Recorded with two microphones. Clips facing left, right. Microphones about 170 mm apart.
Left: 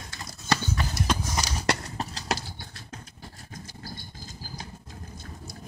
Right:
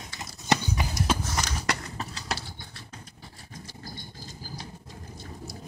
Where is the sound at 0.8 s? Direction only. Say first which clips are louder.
Right 1 dB; 10° right (ahead or behind).